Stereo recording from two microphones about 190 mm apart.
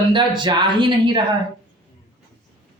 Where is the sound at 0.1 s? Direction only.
25° right (ahead or behind).